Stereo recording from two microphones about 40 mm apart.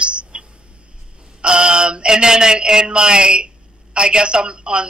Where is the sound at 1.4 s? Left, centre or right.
Right.